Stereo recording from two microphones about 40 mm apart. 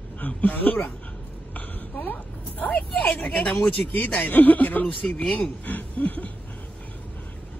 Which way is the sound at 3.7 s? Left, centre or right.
Left.